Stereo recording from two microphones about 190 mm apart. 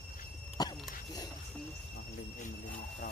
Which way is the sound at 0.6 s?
20° left (ahead or behind).